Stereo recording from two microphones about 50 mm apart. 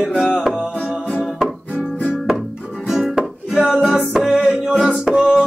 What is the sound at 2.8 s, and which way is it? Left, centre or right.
Music, centre.